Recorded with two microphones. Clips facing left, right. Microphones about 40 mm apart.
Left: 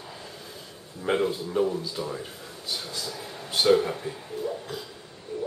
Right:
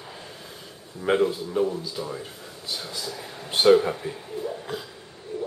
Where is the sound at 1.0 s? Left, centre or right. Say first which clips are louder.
Right 3 dB; centre.